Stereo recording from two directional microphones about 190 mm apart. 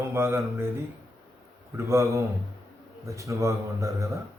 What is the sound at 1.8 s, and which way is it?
A man's voice, 15° right (ahead or behind).